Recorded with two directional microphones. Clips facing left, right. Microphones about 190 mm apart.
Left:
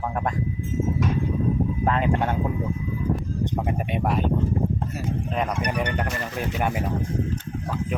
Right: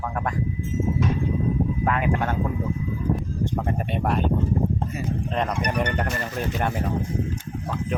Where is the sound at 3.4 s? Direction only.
15° left (ahead or behind).